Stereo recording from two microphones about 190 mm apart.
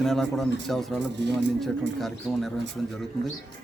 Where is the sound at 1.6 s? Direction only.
Centre (ahead or behind).